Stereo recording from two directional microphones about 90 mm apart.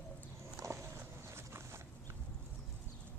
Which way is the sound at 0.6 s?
30° right (ahead or behind).